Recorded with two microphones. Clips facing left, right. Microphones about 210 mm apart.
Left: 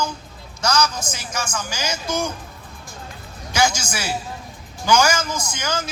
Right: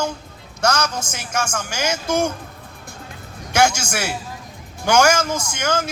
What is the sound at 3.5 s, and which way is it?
Speech, 65° right (ahead or behind).